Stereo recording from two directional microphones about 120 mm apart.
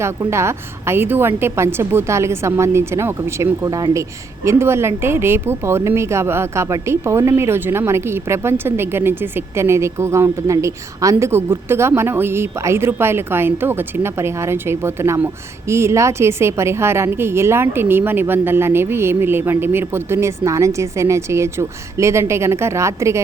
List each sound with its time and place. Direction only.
0.0 s a woman's voice: 20° right (ahead or behind)
4.4 s a woman's voice: 20° right (ahead or behind)